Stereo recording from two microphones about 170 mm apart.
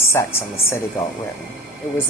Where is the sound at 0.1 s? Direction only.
15° left (ahead or behind).